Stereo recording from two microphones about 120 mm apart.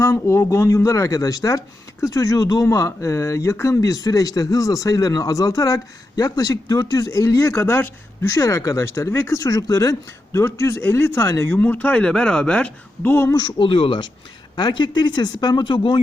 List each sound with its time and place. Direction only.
0.0 s speech: 25° left (ahead or behind)
13.3 s speech: 45° left (ahead or behind)